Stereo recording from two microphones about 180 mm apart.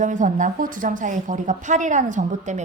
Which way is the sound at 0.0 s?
45° right (ahead or behind).